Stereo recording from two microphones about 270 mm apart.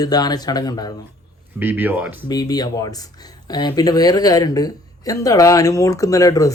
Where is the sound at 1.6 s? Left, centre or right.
Centre.